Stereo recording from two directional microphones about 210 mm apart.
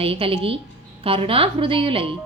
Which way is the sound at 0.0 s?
25° right (ahead or behind).